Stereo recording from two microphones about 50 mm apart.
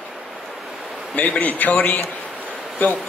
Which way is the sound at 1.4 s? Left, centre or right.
Left.